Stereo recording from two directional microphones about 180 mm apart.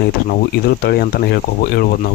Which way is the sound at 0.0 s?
60° left (ahead or behind).